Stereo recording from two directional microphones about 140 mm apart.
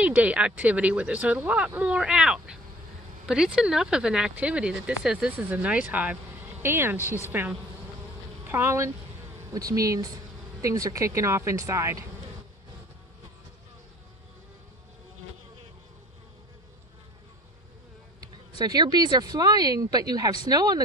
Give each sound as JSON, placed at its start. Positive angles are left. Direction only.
{"t": 0.0, "sound": "speech", "side_deg": -10}
{"t": 7.0, "sound": "a woman's voice", "side_deg": 20}
{"t": 7.2, "sound": "speech", "side_deg": -15}
{"t": 18.6, "sound": "speech", "side_deg": -30}